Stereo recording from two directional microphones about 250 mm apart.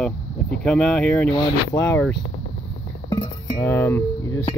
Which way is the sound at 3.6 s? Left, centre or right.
Centre.